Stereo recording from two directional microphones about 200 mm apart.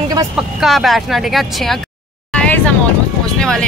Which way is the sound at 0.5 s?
Centre (ahead or behind).